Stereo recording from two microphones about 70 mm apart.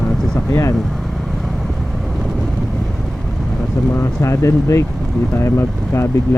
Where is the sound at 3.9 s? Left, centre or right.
Left.